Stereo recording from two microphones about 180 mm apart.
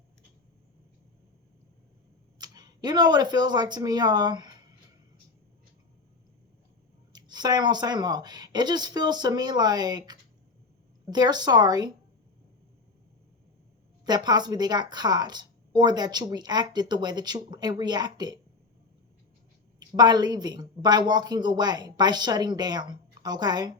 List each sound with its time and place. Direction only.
2.4 s speech: 25° right (ahead or behind)
7.1 s a woman's voice: 25° right (ahead or behind)
14.0 s a woman's voice: 25° right (ahead or behind)
20.0 s a woman's voice: 25° right (ahead or behind)